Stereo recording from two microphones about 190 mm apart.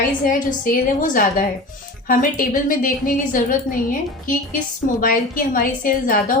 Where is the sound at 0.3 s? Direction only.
45° left (ahead or behind).